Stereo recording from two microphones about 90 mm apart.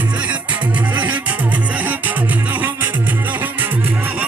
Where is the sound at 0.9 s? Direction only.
20° right (ahead or behind).